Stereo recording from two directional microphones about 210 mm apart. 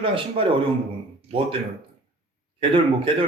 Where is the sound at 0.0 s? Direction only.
25° right (ahead or behind).